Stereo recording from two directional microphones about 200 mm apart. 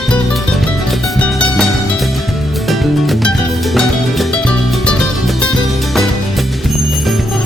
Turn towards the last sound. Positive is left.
turn(degrees=0)  # may be behind; listen again after turning